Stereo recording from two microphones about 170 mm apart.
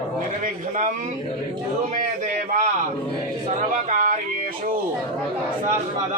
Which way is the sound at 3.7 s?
45° right (ahead or behind).